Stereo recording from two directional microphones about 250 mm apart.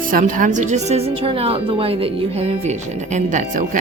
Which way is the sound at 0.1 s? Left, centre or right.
Right.